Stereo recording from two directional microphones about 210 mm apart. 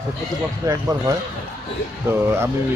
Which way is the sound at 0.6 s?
15° right (ahead or behind).